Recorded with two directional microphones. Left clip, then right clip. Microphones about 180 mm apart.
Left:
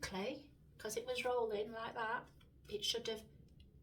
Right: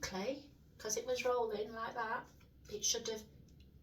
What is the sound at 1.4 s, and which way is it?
Speech, 20° left (ahead or behind).